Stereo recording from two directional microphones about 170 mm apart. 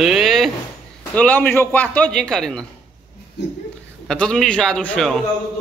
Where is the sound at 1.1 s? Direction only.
10° left (ahead or behind).